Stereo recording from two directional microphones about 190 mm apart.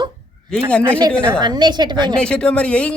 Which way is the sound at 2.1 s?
5° left (ahead or behind).